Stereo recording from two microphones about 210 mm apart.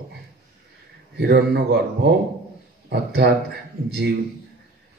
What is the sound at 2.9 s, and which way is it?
Speech, 50° right (ahead or behind).